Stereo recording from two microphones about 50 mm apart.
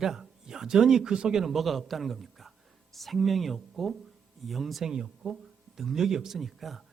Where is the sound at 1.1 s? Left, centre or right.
Centre.